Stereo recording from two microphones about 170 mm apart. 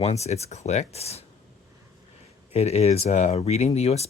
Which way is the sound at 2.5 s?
40° left (ahead or behind).